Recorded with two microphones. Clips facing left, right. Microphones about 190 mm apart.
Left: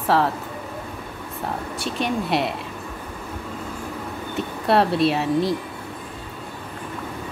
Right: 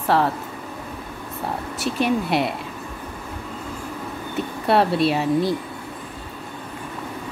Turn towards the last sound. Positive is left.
turn(degrees=0)  # may be behind; listen again after turning